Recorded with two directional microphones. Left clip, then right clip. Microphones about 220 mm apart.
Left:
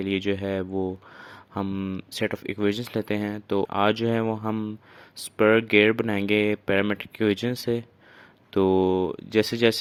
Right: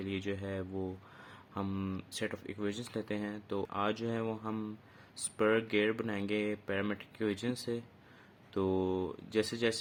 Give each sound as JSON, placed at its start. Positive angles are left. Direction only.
{"t": 0.0, "sound": "speech", "side_deg": 35}